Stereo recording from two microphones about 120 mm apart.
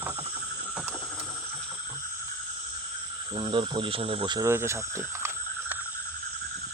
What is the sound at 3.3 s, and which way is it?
Speech, 45° right (ahead or behind).